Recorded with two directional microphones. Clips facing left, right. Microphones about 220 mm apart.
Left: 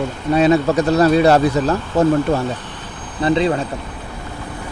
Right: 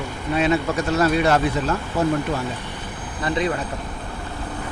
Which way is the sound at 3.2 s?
30° left (ahead or behind).